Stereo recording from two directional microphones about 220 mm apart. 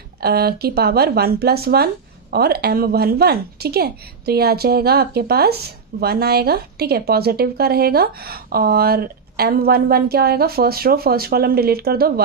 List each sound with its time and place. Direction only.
0.2 s a woman's voice: 45° right (ahead or behind)